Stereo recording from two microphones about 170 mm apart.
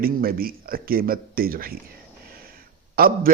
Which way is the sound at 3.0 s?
60° right (ahead or behind).